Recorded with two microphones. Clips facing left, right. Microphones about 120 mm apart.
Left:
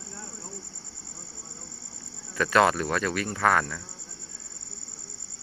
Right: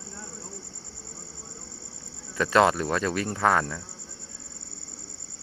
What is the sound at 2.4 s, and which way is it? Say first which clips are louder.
Speech: right 1 dB; 25° right (ahead or behind).